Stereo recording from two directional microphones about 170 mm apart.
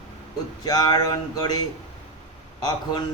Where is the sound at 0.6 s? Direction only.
25° left (ahead or behind).